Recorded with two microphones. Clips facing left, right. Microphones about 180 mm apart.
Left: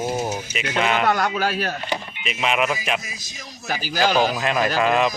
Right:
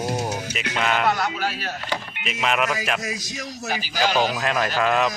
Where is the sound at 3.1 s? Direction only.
80° right.